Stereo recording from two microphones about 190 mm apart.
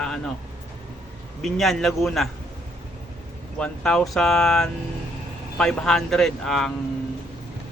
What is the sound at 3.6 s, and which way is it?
Speech, 5° left (ahead or behind).